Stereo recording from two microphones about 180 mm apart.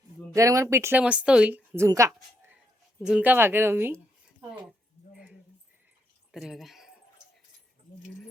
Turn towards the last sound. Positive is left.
turn(degrees=0)  # may be behind; listen again after turning